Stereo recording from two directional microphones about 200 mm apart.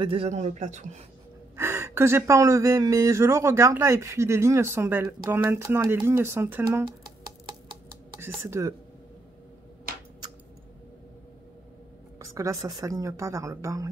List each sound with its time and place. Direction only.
0.0 s a man's voice: 30° right (ahead or behind)
1.6 s speech: 10° right (ahead or behind)
8.2 s speech: 10° right (ahead or behind)
12.2 s speech: 15° right (ahead or behind)